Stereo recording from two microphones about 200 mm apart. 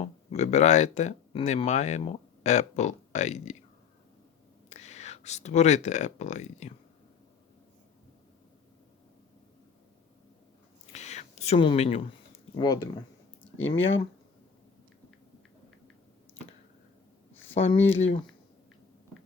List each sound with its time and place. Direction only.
0.0 s speech: 35° left (ahead or behind)
4.7 s speech: 35° left (ahead or behind)
10.9 s whispering: 35° left (ahead or behind)
12.5 s speech: 20° left (ahead or behind)
13.6 s speech: 85° left
17.5 s speech: 30° left (ahead or behind)